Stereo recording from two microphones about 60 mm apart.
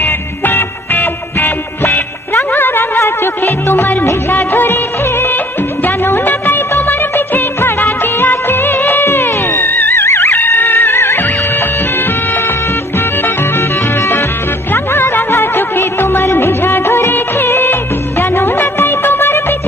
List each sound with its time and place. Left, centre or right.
0.0 s music: left
4.3 s music of bollywood: left
6.1 s music of bollywood: left
10.1 s music: left
14.7 s music: left
17.1 s music of bollywood: left